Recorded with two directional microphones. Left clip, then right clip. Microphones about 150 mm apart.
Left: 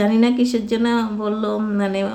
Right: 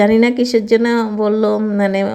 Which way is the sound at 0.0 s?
40° right (ahead or behind).